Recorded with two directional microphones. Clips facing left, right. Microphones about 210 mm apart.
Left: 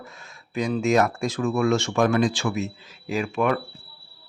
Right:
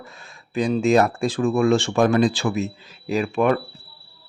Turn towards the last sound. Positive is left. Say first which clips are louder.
# right 4 dB
turn(degrees=-35)  # may be behind; listen again after turning